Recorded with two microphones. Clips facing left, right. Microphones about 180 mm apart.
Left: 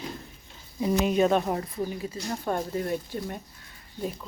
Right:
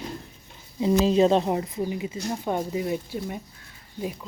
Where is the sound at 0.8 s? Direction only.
25° right (ahead or behind).